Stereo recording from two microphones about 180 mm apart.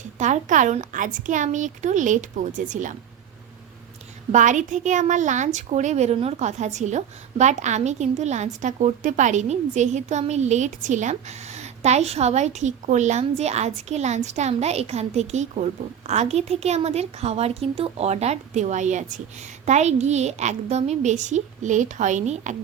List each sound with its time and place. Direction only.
0.2 s a woman's voice: 45° right (ahead or behind)
4.3 s a woman's voice: 45° right (ahead or behind)